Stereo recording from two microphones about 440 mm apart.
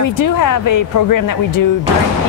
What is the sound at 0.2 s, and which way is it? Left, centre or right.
Speech, left.